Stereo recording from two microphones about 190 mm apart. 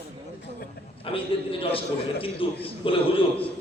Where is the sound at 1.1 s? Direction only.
30° left (ahead or behind).